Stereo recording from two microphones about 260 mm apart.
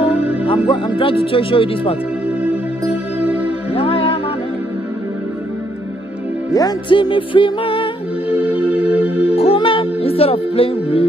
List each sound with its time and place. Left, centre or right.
0.1 s music: centre
0.5 s speech: centre
3.3 s music: centre
3.7 s music: left
6.5 s speech: centre
8.5 s music: centre
9.3 s music: left